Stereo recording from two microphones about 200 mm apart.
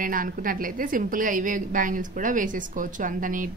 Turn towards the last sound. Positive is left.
turn(degrees=-40)  # may be behind; listen again after turning